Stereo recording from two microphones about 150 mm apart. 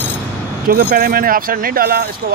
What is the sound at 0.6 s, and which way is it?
Speech, 80° right.